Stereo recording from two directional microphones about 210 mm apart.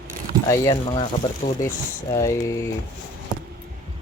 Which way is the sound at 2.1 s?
15° left (ahead or behind).